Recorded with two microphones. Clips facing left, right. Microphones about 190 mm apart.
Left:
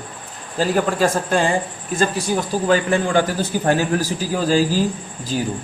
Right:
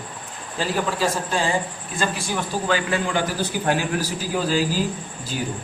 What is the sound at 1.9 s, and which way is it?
A man's voice, 40° left (ahead or behind).